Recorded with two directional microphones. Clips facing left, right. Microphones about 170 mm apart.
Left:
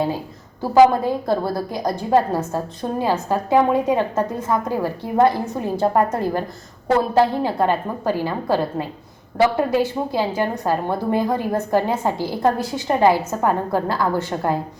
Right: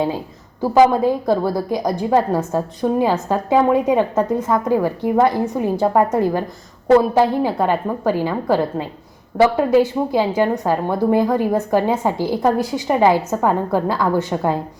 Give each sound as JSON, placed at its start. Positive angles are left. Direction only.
{"t": 0.6, "sound": "a woman's voice", "side_deg": -15}